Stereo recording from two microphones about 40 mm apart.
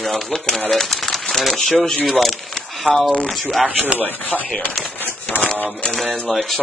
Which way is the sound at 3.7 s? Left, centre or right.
Right.